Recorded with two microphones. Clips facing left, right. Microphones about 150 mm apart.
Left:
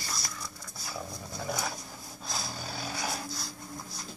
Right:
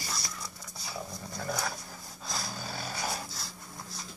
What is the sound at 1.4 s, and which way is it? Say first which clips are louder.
Dog: even; 10° left (ahead or behind).